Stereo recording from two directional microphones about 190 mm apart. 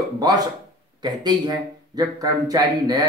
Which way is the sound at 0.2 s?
20° right (ahead or behind).